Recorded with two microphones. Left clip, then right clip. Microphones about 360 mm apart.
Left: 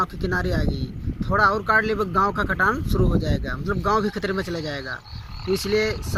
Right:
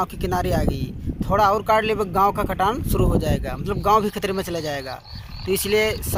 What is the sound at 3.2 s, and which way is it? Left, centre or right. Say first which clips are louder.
Speech: right 2 dB; centre.